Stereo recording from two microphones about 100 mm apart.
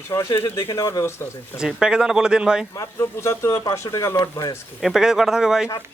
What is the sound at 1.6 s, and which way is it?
Speech, 5° right (ahead or behind).